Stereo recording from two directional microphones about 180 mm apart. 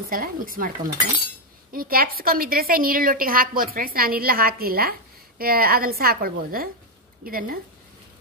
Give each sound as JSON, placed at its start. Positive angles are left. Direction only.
{"t": 0.1, "sound": "a woman's voice", "side_deg": -50}